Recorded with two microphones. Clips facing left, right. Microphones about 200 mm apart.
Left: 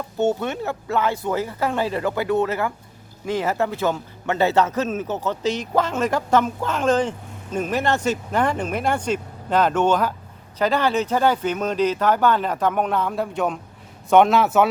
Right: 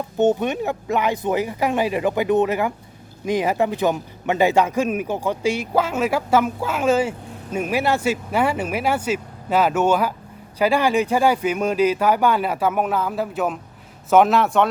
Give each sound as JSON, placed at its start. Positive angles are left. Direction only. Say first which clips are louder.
{"t": 0.2, "sound": "a man's voice", "louder": "right 3 dB", "side_deg": -15}